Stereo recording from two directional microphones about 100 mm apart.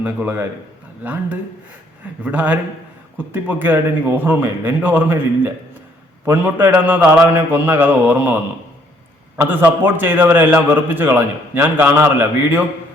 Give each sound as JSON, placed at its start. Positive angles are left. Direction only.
{"t": 0.0, "sound": "a man's voice", "side_deg": -15}
{"t": 6.2, "sound": "a man's voice", "side_deg": -20}
{"t": 9.4, "sound": "a man's voice", "side_deg": -20}